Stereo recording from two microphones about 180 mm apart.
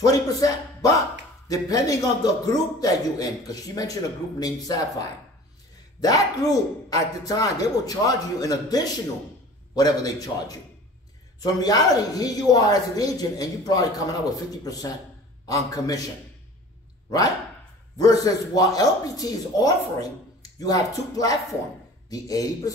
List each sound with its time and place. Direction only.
0.0 s a man's voice: 20° left (ahead or behind)
5.9 s a man's voice: 20° left (ahead or behind)
17.9 s a man's voice: 20° left (ahead or behind)